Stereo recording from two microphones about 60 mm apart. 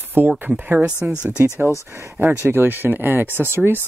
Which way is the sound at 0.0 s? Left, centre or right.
Right.